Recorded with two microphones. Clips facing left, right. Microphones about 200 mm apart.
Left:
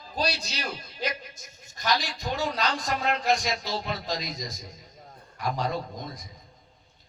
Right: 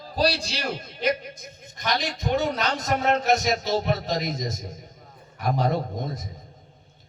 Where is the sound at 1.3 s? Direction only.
60° right (ahead or behind).